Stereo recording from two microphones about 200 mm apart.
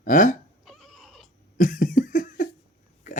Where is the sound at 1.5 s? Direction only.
45° left (ahead or behind).